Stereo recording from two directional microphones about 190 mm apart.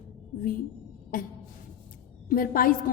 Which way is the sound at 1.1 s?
45° left (ahead or behind).